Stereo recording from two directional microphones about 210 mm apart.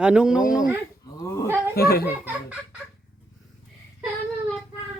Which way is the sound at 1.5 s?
10° right (ahead or behind).